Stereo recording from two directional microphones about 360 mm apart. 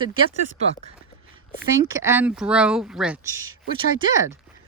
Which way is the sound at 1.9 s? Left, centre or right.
Centre.